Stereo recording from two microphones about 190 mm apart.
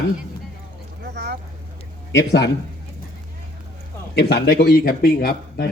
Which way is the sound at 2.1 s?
65° left (ahead or behind).